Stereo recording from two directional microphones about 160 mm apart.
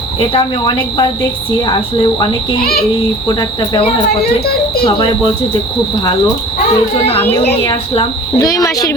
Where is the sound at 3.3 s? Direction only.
25° left (ahead or behind).